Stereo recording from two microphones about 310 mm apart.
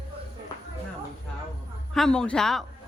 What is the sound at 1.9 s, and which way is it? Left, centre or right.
Speech, centre.